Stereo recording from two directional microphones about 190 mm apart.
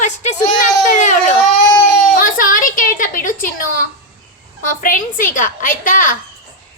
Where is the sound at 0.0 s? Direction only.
40° left (ahead or behind).